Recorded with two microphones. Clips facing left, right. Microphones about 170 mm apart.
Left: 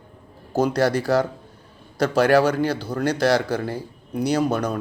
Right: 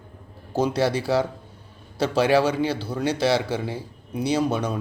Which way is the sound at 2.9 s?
10° right (ahead or behind).